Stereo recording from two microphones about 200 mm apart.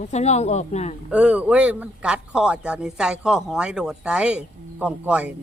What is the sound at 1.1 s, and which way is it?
Speech, 5° right (ahead or behind).